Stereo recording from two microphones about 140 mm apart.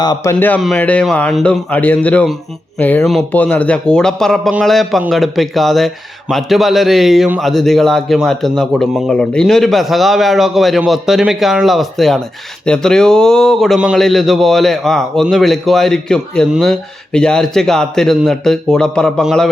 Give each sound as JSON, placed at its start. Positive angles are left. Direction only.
{"t": 0.0, "sound": "speech", "side_deg": 30}
{"t": 0.3, "sound": "a man's voice", "side_deg": 15}
{"t": 1.7, "sound": "a man's voice", "side_deg": 10}